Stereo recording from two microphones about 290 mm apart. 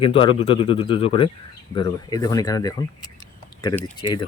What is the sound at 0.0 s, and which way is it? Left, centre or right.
Speech, centre.